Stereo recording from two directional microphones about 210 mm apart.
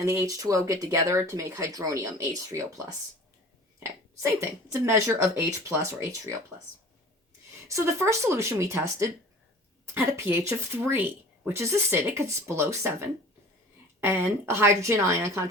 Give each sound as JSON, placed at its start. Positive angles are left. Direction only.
{"t": 0.0, "sound": "speech", "side_deg": -15}
{"t": 4.2, "sound": "speech", "side_deg": -10}
{"t": 7.7, "sound": "speech", "side_deg": -15}